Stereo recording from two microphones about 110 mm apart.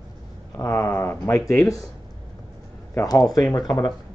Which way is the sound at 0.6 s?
30° left (ahead or behind).